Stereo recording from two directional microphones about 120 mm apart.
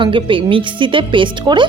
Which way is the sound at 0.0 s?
45° right (ahead or behind).